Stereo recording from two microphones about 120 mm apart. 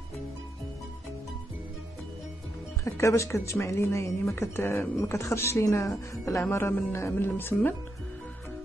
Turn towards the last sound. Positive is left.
turn(degrees=15)  # may be behind; listen again after turning